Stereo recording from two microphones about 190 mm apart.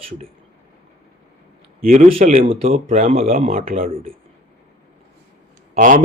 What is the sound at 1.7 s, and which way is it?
Speech, 45° right (ahead or behind).